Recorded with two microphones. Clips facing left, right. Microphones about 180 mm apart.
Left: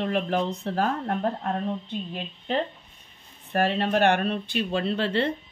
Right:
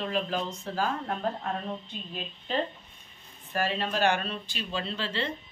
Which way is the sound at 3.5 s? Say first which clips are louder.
Left 6 dB; 60° left (ahead or behind).